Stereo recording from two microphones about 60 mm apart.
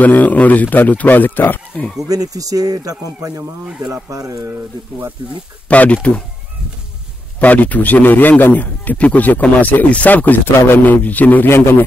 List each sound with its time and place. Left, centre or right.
0.0 s a man's voice: left
2.0 s speech: right
5.7 s a man's voice: left
7.3 s a man's voice: left
11.4 s a man's voice: left